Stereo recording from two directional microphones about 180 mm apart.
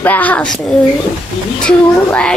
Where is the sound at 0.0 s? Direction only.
10° left (ahead or behind).